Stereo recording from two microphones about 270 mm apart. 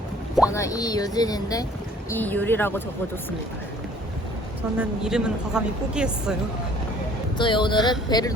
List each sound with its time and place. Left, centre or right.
0.4 s speech: centre
4.8 s speech: centre
7.3 s speech: centre